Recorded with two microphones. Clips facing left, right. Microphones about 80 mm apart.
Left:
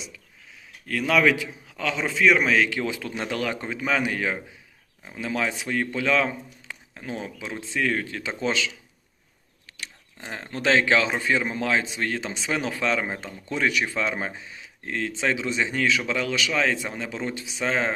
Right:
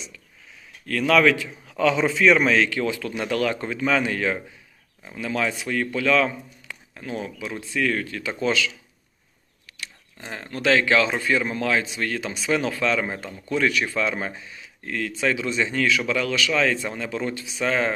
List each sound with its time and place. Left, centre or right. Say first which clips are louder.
0.9 s a man's voice: right 3 dB; centre
1.7 s a man's voice: right 7 dB; centre
2.6 s speech: right 3 dB; centre
9.8 s speech: right 1 dB; left